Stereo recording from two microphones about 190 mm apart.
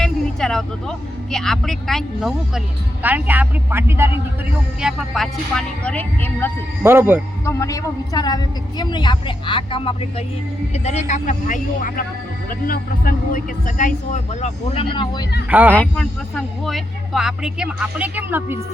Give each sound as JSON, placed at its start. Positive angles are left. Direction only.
{"t": 0.0, "sound": "speech", "side_deg": 5}
{"t": 4.8, "sound": "speech", "side_deg": 0}
{"t": 6.8, "sound": "speech", "side_deg": -10}
{"t": 7.4, "sound": "a woman's voice", "side_deg": 15}
{"t": 11.1, "sound": "speech", "side_deg": 40}
{"t": 15.4, "sound": "speech", "side_deg": -10}
{"t": 15.7, "sound": "speech", "side_deg": 5}